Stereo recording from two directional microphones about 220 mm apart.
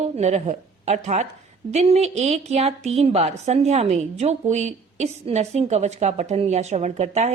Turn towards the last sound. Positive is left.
turn(degrees=-30)  # may be behind; listen again after turning